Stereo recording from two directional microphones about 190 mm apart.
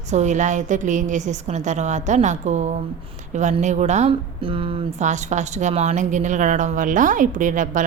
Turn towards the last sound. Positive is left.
turn(degrees=-40)  # may be behind; listen again after turning